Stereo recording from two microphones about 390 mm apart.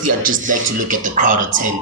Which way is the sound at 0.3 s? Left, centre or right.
Centre.